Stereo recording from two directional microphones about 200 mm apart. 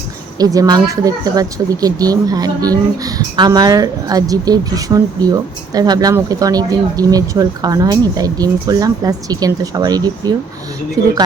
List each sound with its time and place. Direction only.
0.3 s speech: 20° right (ahead or behind)